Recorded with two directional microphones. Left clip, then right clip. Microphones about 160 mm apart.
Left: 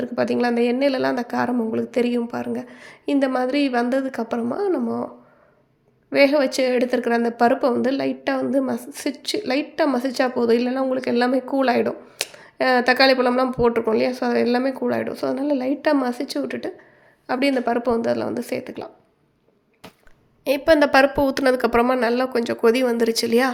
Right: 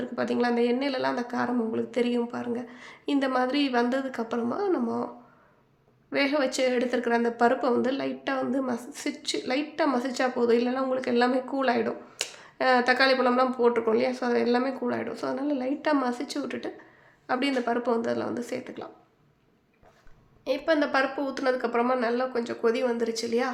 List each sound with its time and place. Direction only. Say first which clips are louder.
0.0 s speech: left 6 dB; 35° left (ahead or behind)
6.1 s speech: left 9 dB; 30° left (ahead or behind)
20.4 s speech: left 9 dB; 50° left (ahead or behind)